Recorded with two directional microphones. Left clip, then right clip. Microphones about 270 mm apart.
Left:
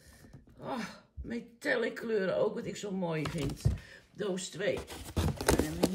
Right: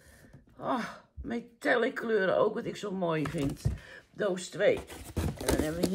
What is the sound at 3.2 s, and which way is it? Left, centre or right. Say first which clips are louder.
Speech: right 3 dB; centre.